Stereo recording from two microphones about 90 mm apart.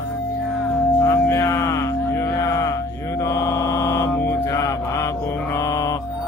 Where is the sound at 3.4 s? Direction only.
40° left (ahead or behind).